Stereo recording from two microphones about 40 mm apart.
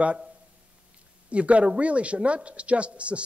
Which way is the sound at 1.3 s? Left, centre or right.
Right.